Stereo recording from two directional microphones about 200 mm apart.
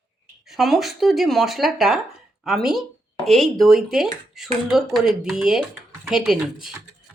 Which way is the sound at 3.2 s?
Centre (ahead or behind).